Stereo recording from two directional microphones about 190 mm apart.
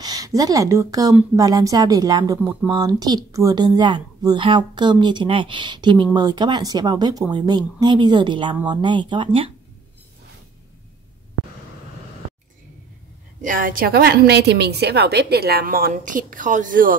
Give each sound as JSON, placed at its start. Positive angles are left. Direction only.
{"t": 0.0, "sound": "speech", "side_deg": -20}
{"t": 13.4, "sound": "a woman's voice", "side_deg": -45}